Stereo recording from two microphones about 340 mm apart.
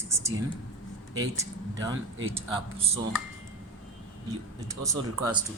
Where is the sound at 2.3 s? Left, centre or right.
Centre.